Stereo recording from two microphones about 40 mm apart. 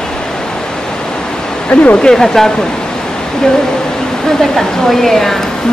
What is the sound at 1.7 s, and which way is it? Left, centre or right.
Speech, left.